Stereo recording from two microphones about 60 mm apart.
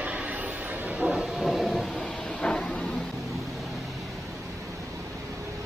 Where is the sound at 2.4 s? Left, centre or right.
Centre.